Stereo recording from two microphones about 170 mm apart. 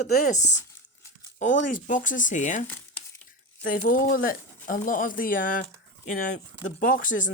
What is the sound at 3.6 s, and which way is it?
Speech, 55° left (ahead or behind).